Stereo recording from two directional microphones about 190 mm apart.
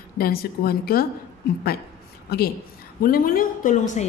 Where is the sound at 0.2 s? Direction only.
55° left (ahead or behind).